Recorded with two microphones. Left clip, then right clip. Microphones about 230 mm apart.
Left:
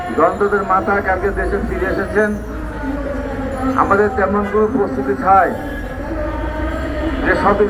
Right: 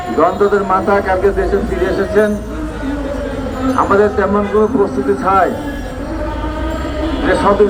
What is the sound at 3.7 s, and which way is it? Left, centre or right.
A man's voice, right.